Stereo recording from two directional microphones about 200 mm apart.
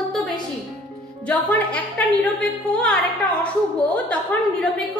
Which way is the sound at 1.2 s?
5° left (ahead or behind).